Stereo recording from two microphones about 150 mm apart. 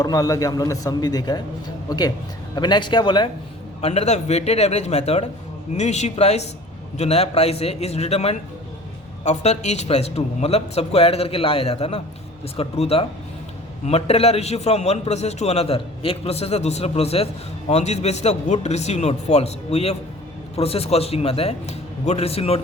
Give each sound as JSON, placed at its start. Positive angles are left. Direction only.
{"t": 0.0, "sound": "a man's voice", "side_deg": 25}
{"t": 3.8, "sound": "a man's voice", "side_deg": 45}